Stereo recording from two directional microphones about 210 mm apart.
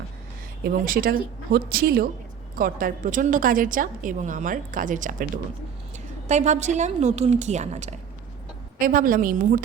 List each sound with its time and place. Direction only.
0.6 s a woman's voice: 45° right (ahead or behind)
6.2 s a woman's voice: 35° right (ahead or behind)